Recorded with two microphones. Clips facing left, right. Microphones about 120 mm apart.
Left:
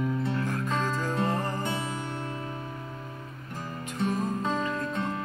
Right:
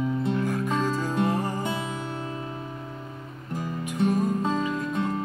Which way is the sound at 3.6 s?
10° right (ahead or behind).